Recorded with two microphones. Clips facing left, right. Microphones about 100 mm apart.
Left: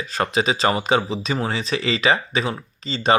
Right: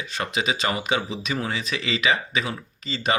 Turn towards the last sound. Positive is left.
turn(degrees=30)  # may be behind; listen again after turning